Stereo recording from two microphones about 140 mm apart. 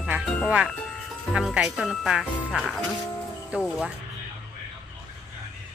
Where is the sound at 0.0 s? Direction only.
5° right (ahead or behind).